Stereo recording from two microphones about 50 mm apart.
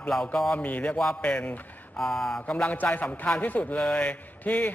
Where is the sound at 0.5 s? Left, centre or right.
Left.